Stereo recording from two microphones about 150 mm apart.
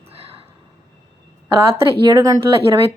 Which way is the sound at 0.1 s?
40° right (ahead or behind).